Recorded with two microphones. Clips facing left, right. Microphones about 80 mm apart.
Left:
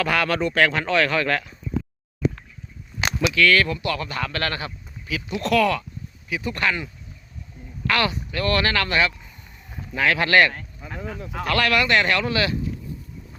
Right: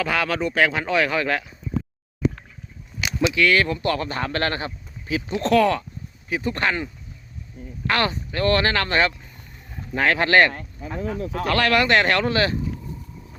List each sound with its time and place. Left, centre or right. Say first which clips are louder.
0.0 s speech: left 1 dB; centre
3.2 s speech: even; right
3.8 s speech: right 2 dB; right